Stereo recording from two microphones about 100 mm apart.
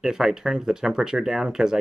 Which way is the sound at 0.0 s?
5° right (ahead or behind).